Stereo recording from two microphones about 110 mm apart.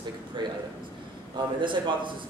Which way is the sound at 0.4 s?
40° right (ahead or behind).